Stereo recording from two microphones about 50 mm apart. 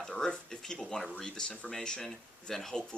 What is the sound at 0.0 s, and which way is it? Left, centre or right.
Speech, centre.